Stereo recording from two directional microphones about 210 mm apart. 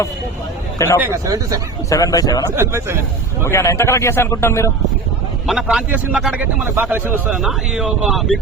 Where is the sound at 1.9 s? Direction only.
15° left (ahead or behind).